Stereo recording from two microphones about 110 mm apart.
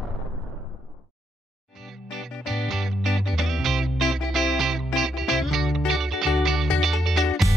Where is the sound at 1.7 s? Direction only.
Centre (ahead or behind).